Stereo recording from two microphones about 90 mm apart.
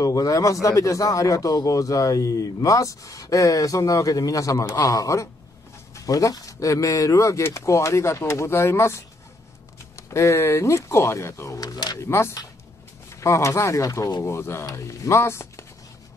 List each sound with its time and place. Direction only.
0.0 s speech: 40° left (ahead or behind)
12.0 s speech: 30° left (ahead or behind)